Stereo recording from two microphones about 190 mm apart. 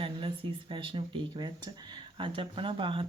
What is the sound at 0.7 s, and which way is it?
Speech, 25° right (ahead or behind).